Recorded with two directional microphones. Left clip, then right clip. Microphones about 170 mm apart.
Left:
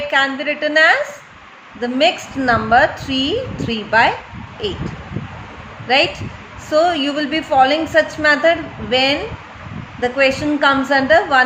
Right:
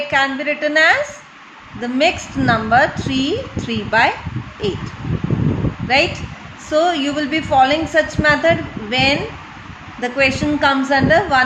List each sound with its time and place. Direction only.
0.1 s a woman's voice: 20° right (ahead or behind)
6.7 s a woman's voice: 15° right (ahead or behind)